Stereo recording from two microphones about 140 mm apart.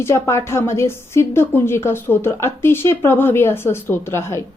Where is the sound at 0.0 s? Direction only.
20° left (ahead or behind).